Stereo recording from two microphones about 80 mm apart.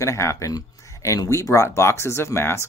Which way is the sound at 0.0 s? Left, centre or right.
Left.